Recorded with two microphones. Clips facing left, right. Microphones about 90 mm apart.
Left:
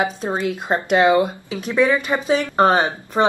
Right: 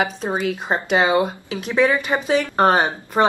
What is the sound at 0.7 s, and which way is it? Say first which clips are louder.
Speech: left 4 dB; 5° right (ahead or behind).